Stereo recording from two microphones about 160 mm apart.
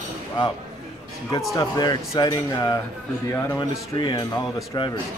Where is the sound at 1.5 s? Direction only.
25° left (ahead or behind).